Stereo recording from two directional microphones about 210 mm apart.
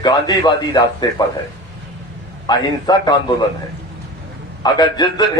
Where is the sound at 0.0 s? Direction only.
20° left (ahead or behind).